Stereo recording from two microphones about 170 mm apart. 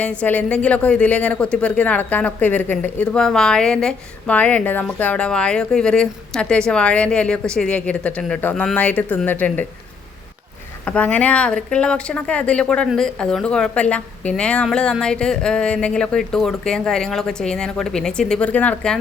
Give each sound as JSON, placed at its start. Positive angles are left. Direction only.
{"t": 0.0, "sound": "a woman's voice", "side_deg": 5}
{"t": 10.8, "sound": "speech", "side_deg": 10}